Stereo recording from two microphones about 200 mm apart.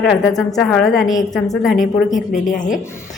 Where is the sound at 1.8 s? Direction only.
40° left (ahead or behind).